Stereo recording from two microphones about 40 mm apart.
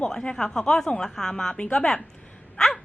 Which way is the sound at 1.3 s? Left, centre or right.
Left.